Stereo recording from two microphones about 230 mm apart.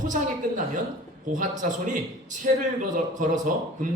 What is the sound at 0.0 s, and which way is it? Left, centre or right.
Speech, right.